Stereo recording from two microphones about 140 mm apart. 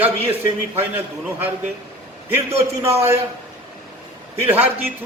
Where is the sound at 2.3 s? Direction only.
15° right (ahead or behind).